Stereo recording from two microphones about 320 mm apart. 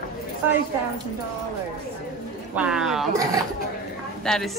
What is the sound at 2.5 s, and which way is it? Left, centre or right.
Speech, centre.